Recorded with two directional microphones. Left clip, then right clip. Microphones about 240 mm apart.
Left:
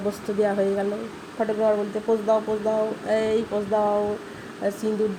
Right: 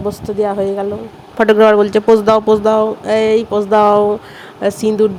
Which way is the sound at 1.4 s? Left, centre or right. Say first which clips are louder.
Right 14 dB; right.